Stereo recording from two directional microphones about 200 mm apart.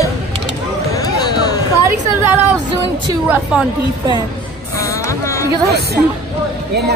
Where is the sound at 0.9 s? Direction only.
20° left (ahead or behind).